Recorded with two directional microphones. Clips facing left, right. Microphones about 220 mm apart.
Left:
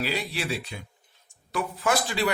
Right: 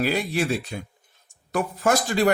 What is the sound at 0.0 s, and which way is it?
Speech, 50° right (ahead or behind).